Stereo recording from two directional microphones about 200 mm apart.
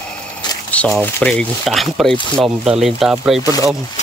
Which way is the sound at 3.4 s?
15° left (ahead or behind).